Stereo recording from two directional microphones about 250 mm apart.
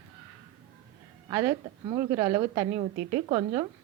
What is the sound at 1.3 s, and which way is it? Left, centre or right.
A woman's voice, centre.